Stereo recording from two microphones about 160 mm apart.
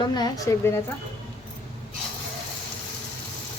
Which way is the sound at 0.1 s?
25° left (ahead or behind).